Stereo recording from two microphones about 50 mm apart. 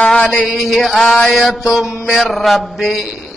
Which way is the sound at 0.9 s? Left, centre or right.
Centre.